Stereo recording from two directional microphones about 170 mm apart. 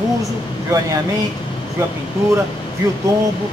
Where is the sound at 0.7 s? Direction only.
20° right (ahead or behind).